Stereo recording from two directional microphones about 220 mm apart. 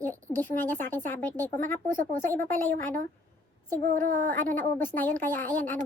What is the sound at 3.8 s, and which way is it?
Speech, 35° right (ahead or behind).